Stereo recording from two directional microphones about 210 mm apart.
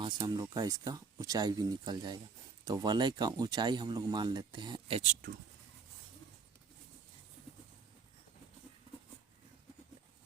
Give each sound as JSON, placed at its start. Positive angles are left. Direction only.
{"t": 0.0, "sound": "speech", "side_deg": -20}